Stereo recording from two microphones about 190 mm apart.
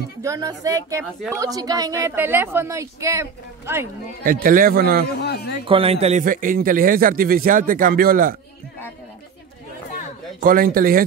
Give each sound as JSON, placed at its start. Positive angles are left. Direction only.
{"t": 0.2, "sound": "a woman's voice", "side_deg": -15}
{"t": 4.2, "sound": "speech", "side_deg": -50}
{"t": 5.2, "sound": "a man's voice", "side_deg": 60}
{"t": 5.7, "sound": "a man's voice", "side_deg": -30}
{"t": 6.2, "sound": "speech", "side_deg": -45}
{"t": 10.4, "sound": "speech", "side_deg": -50}